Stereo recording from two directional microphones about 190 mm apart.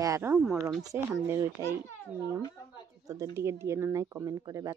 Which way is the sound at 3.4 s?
15° right (ahead or behind).